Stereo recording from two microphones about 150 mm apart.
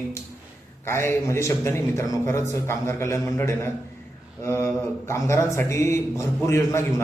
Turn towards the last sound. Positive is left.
turn(degrees=20)  # may be behind; listen again after turning